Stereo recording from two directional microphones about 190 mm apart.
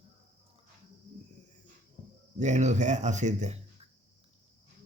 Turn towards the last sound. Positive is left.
turn(degrees=-35)  # may be behind; listen again after turning